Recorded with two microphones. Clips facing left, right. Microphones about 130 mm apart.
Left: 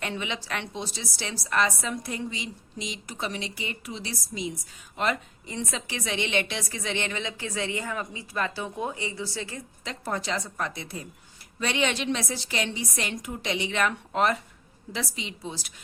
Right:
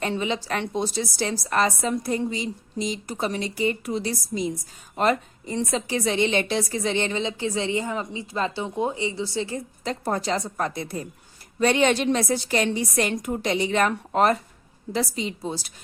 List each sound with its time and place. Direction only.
0.0 s a woman's voice: 35° right (ahead or behind)